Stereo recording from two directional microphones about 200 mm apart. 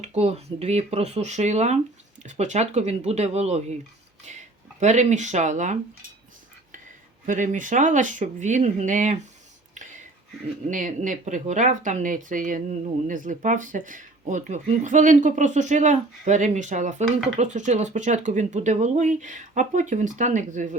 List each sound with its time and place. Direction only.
0.0 s speech: 30° right (ahead or behind)
7.3 s speech: 40° right (ahead or behind)
9.7 s whispering: 40° right (ahead or behind)
10.7 s speech: 40° right (ahead or behind)